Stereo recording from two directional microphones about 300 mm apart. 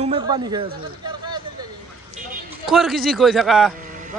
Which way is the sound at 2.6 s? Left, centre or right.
Centre.